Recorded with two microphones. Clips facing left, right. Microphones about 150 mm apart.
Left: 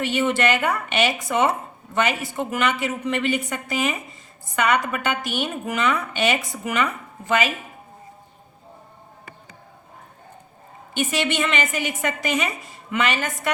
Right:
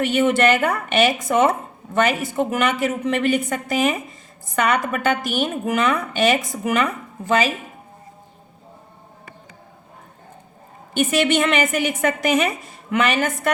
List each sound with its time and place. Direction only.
0.1 s a woman's voice: 50° right (ahead or behind)
11.1 s a woman's voice: 55° right (ahead or behind)